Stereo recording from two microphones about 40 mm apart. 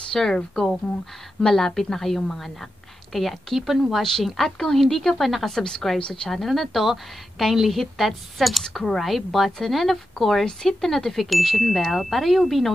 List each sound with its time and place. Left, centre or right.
0.1 s a woman's voice: centre
5.9 s a woman's voice: left
6.3 s speech: centre
10.4 s a woman's voice: centre